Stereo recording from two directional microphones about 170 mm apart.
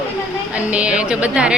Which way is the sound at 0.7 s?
5° right (ahead or behind).